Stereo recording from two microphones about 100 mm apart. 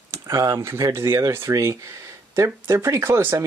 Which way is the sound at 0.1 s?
35° right (ahead or behind).